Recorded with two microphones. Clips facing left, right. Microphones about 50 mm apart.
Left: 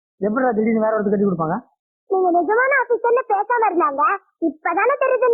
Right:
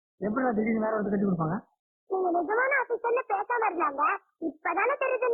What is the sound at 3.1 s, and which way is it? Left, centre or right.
Speech, left.